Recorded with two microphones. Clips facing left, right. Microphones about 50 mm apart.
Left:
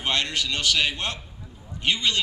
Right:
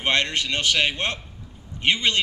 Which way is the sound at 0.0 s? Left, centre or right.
Right.